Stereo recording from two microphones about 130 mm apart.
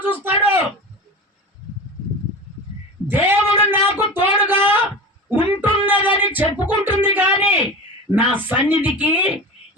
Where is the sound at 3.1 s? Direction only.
15° right (ahead or behind).